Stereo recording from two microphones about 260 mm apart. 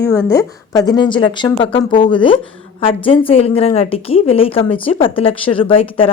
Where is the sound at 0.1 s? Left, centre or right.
Centre.